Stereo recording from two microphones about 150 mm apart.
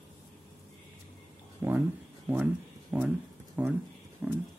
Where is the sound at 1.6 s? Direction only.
20° right (ahead or behind).